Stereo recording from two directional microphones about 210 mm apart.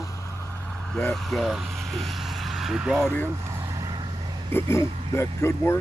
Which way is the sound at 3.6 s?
20° right (ahead or behind).